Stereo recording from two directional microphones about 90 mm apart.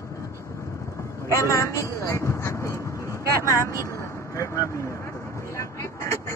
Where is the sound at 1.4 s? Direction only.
35° left (ahead or behind).